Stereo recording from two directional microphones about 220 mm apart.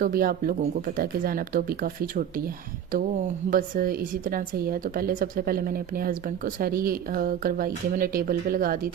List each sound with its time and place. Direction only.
0.0 s a woman's voice: 40° right (ahead or behind)
3.5 s a woman's voice: 40° right (ahead or behind)